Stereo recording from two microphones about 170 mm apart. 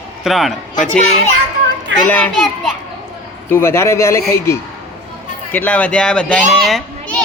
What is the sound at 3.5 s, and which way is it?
Speech, 15° left (ahead or behind).